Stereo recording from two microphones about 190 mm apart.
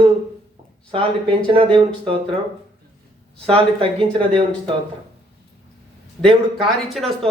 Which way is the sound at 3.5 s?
30° right (ahead or behind).